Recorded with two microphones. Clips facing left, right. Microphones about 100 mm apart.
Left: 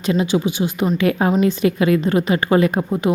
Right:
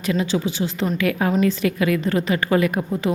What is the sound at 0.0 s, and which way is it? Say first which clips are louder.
A woman's voice: left 3 dB; 20° left (ahead or behind).